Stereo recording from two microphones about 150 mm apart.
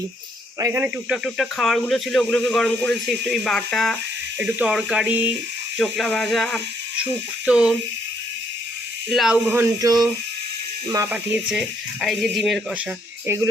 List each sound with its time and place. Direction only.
0.6 s speech: 15° right (ahead or behind)
1.1 s speech: centre (ahead or behind)
5.7 s speech: centre (ahead or behind)
9.0 s speech: centre (ahead or behind)
9.8 s speech: 25° right (ahead or behind)
11.4 s speech: 5° right (ahead or behind)
13.2 s speech: 15° right (ahead or behind)